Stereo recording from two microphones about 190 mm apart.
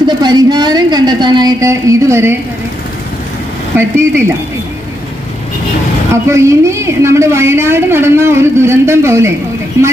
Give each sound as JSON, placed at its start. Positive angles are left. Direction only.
{"t": 0.0, "sound": "a woman's voice", "side_deg": -20}
{"t": 3.7, "sound": "a woman's voice", "side_deg": -10}
{"t": 6.2, "sound": "a woman's voice", "side_deg": -15}